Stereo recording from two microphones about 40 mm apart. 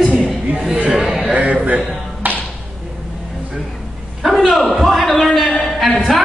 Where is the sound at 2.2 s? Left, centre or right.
Right.